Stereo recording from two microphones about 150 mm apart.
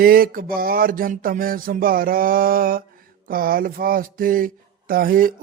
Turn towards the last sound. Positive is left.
turn(degrees=-70)  # may be behind; listen again after turning